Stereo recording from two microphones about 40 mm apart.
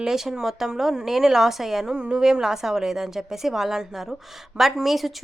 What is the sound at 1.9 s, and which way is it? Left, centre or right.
Speech, centre.